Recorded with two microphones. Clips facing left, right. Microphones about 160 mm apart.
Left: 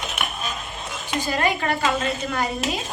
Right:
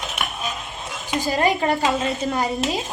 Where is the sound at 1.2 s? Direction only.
25° right (ahead or behind).